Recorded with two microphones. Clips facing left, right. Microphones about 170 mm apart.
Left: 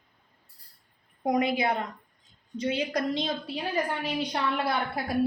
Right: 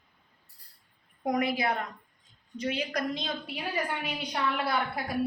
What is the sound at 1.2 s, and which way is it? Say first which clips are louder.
A woman's voice: left 3 dB; 25° left (ahead or behind).